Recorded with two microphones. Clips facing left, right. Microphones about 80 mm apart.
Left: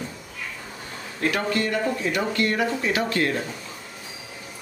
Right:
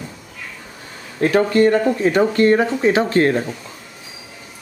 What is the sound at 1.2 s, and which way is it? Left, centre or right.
Speech, right.